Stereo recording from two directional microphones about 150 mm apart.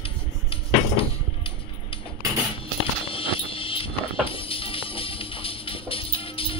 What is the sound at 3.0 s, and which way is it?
Music, 35° left (ahead or behind).